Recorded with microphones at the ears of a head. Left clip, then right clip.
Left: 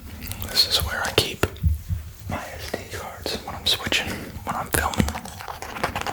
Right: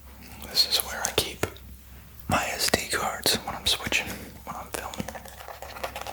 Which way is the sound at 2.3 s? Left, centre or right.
Right.